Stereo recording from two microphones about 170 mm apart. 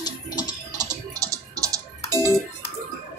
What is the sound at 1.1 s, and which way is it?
Typing, 20° right (ahead or behind).